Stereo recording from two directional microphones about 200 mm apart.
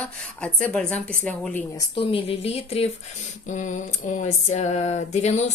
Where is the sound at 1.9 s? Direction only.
30° left (ahead or behind).